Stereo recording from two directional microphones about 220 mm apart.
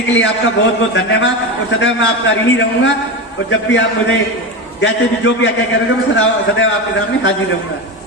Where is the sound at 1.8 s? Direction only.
60° left (ahead or behind).